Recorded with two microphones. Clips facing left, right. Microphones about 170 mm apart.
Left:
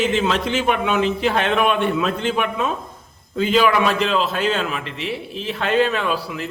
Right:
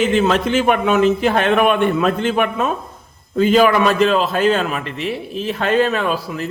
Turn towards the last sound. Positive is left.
turn(degrees=-45)  # may be behind; listen again after turning